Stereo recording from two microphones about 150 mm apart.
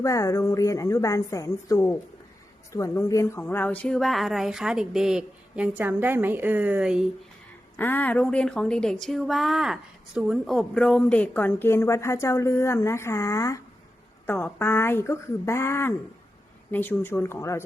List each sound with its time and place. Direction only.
0.0 s a woman's voice: 20° left (ahead or behind); by 7.1 s 5° right (ahead or behind)
7.8 s speech: 15° left (ahead or behind)